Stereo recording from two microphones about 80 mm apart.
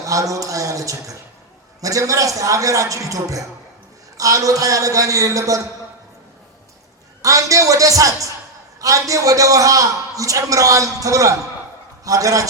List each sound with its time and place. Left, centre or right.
0.0 s a man's voice: right
7.2 s a man's voice: right